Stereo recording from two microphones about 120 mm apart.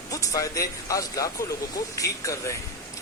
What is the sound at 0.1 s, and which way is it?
Speech, 30° left (ahead or behind).